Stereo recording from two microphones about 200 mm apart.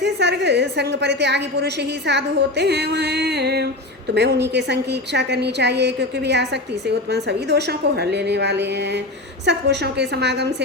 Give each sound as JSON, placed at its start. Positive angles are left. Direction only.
{"t": 0.0, "sound": "a woman's voice", "side_deg": -60}